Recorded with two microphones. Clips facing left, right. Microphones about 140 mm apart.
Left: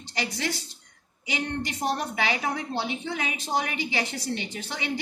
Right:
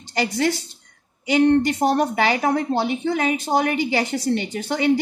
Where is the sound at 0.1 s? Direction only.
50° right (ahead or behind).